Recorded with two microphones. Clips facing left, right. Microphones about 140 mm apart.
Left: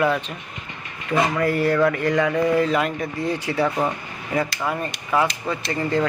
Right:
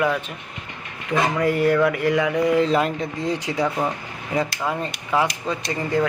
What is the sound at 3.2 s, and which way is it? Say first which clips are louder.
Speech: left 1 dB; 15° right (ahead or behind).